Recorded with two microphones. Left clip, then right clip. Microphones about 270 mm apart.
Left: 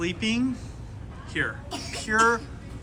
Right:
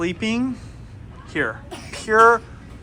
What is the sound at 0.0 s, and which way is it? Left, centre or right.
Speech, centre.